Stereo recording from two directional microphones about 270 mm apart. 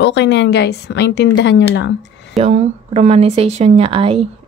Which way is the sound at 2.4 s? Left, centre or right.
Right.